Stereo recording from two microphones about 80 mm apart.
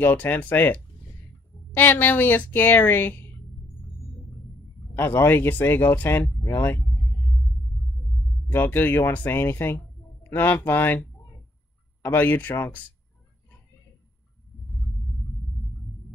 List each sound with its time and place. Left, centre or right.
0.0 s a woman's voice: left
4.9 s a woman's voice: left
6.8 s rumble: centre
8.0 s a sound: centre
8.5 s a woman's voice: left
14.7 s a sound: centre